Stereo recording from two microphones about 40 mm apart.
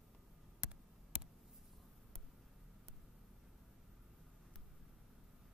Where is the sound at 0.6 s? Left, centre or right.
Right.